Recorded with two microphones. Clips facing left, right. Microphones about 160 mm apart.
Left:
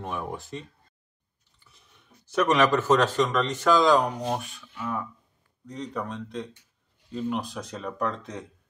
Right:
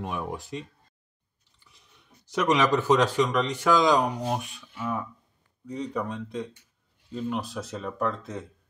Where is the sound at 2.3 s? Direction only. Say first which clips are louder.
Left 1 dB; 15° right (ahead or behind).